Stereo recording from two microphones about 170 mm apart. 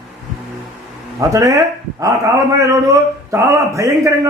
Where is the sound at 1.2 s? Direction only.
20° right (ahead or behind).